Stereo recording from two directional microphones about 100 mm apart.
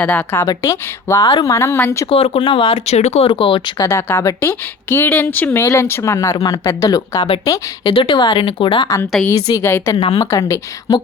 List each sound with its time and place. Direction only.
0.0 s a woman's voice: 15° left (ahead or behind)
0.3 s a woman's voice: 30° left (ahead or behind)
1.3 s speech: 45° left (ahead or behind)
1.5 s speech: 20° left (ahead or behind)
2.0 s speech: 70° left (ahead or behind)
2.8 s speech: 90° left; by 3.6 s 60° left (ahead or behind)
3.8 s speech: 25° left (ahead or behind)
5.6 s a woman's voice: 30° left (ahead or behind)
7.9 s speech: 50° left (ahead or behind)
9.5 s a woman's voice: 25° left (ahead or behind)